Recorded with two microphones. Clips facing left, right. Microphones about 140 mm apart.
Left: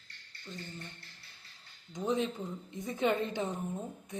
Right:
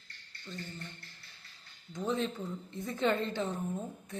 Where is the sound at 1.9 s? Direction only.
15° left (ahead or behind).